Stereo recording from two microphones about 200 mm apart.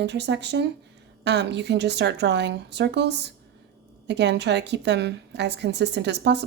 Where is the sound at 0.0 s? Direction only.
60° right (ahead or behind).